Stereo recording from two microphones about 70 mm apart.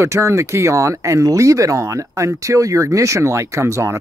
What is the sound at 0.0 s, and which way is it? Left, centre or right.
Speech, right.